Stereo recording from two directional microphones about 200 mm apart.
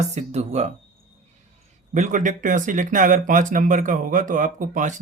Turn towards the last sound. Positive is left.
turn(degrees=-40)  # may be behind; listen again after turning